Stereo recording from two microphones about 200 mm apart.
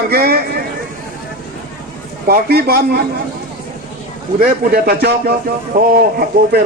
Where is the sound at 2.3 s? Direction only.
50° right (ahead or behind).